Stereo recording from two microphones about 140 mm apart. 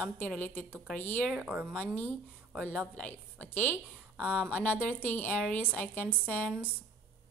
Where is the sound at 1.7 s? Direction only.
10° left (ahead or behind).